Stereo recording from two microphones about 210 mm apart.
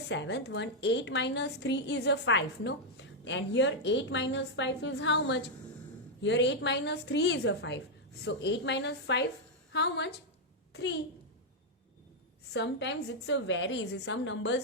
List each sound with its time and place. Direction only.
0.1 s a woman's voice: 55° left (ahead or behind)
12.5 s a woman's voice: 55° left (ahead or behind)